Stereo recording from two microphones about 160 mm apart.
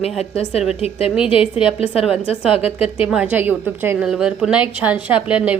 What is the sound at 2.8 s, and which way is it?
A woman's voice, 10° right (ahead or behind).